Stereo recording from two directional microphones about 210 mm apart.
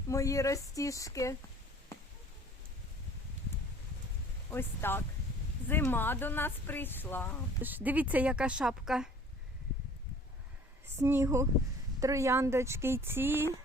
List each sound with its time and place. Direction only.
0.1 s speech: 15° left (ahead or behind)
4.5 s speech: 10° left (ahead or behind)
7.6 s speech: 10° right (ahead or behind)
11.0 s speech: 15° right (ahead or behind)